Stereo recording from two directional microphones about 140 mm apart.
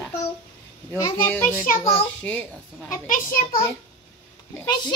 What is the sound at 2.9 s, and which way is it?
Speech, 80° left.